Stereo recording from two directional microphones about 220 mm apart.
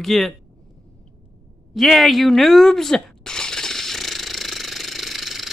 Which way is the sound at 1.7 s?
Centre (ahead or behind).